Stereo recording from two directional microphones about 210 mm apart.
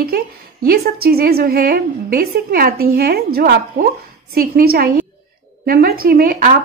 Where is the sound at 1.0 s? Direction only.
45° right (ahead or behind).